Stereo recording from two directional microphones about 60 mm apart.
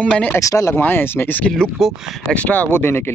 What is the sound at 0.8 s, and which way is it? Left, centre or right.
Speech, left.